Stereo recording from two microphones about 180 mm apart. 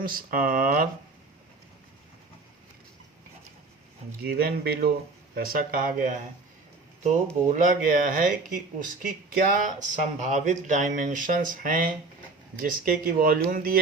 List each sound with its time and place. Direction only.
0.0 s speech: 55° right (ahead or behind)
4.2 s speech: 60° right (ahead or behind)
7.4 s speech: 45° right (ahead or behind)